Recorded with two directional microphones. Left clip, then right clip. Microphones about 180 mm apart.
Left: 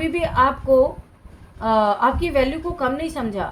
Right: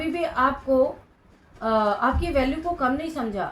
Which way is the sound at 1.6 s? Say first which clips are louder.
Left 4 dB; 55° left (ahead or behind).